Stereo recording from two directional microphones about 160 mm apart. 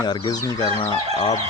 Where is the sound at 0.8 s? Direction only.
35° left (ahead or behind).